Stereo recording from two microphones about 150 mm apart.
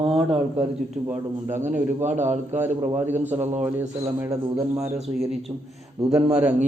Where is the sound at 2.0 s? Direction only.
50° right (ahead or behind).